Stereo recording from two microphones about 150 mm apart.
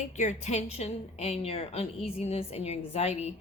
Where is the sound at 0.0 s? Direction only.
50° left (ahead or behind).